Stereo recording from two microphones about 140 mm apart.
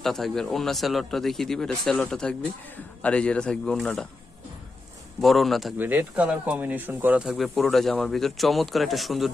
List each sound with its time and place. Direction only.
0.0 s a man's voice: centre (ahead or behind)
5.2 s speech: centre (ahead or behind)
5.8 s speech: 15° right (ahead or behind)